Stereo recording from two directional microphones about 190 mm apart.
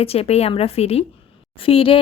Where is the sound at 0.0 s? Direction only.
30° left (ahead or behind).